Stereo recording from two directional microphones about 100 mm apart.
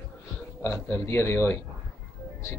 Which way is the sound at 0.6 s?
30° left (ahead or behind).